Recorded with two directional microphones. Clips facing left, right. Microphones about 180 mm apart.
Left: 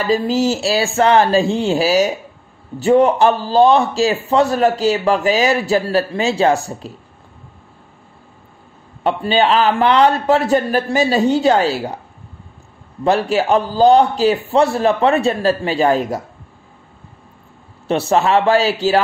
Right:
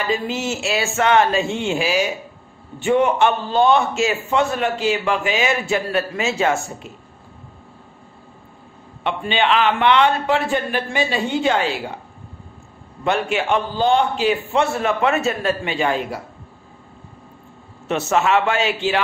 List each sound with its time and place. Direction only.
0.0 s a man's voice: 35° left (ahead or behind)
9.0 s a man's voice: 40° left (ahead or behind)
13.0 s a man's voice: 35° left (ahead or behind)
17.8 s a man's voice: 35° left (ahead or behind)